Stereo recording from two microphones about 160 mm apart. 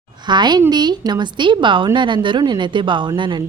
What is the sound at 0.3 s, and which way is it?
A woman's voice, 25° right (ahead or behind).